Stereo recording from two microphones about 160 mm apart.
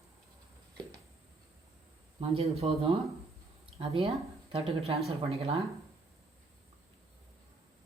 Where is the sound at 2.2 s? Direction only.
40° right (ahead or behind).